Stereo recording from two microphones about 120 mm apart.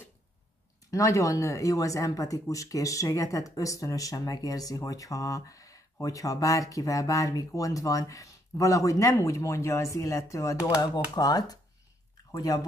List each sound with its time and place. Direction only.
0.9 s speech: 25° left (ahead or behind)